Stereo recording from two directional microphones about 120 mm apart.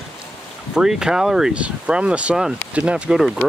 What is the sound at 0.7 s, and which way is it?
Speech, 5° right (ahead or behind).